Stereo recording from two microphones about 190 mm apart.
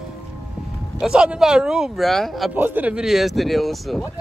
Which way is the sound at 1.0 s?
5° right (ahead or behind).